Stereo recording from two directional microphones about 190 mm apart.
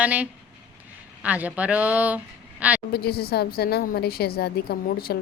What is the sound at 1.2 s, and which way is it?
Speech, 10° right (ahead or behind).